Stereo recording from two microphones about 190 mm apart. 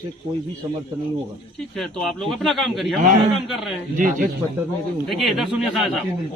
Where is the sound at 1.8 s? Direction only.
Centre (ahead or behind).